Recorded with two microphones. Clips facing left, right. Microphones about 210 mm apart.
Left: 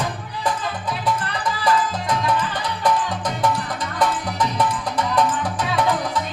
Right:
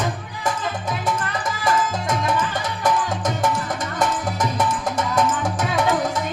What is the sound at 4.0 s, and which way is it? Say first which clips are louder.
Music: left 1 dB; 45° right (ahead or behind).